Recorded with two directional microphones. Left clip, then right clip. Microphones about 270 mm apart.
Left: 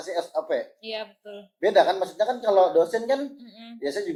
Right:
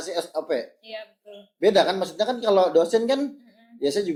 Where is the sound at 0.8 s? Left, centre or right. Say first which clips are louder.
Left 4 dB; left.